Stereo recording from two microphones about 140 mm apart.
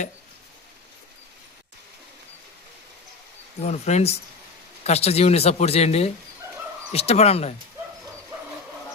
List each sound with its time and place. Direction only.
3.7 s speech: 55° left (ahead or behind)